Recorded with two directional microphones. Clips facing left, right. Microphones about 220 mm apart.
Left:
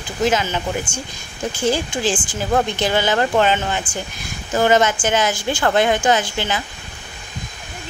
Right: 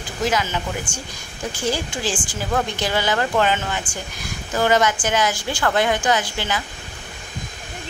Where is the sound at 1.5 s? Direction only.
25° left (ahead or behind).